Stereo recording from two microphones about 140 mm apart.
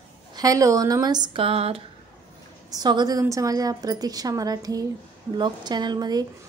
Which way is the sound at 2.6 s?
30° right (ahead or behind).